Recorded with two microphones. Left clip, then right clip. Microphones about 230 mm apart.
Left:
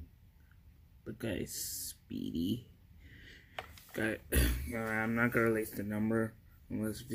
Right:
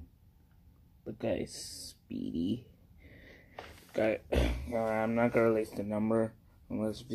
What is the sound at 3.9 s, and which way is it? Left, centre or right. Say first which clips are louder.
Speech: right 5 dB; centre.